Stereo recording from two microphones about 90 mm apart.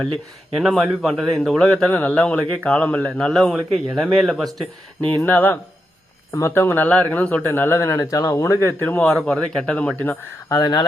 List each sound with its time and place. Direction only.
0.6 s a man's voice: centre (ahead or behind)
5.0 s speech: 20° left (ahead or behind); by 8.5 s 35° left (ahead or behind)
8.6 s a man's voice: 20° left (ahead or behind)
10.6 s speech: 50° left (ahead or behind)